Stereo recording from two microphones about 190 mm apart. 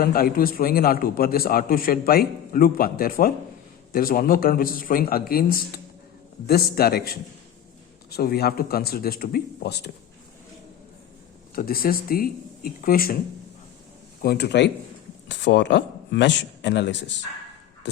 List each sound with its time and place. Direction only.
0.0 s a man's voice: 50° left (ahead or behind)
11.5 s a man's voice: 50° left (ahead or behind)
14.2 s speech: 55° left (ahead or behind)